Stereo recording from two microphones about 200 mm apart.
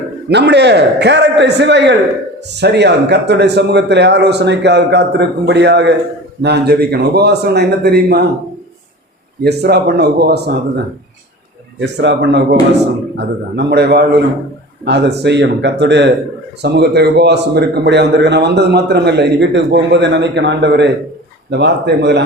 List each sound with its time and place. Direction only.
0.3 s speech: 60° right (ahead or behind)
9.4 s speech: 55° right (ahead or behind)
11.8 s speech: 60° right (ahead or behind)